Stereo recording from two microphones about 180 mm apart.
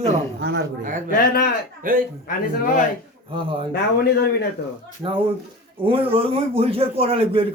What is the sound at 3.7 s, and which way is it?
Speech, 65° left (ahead or behind).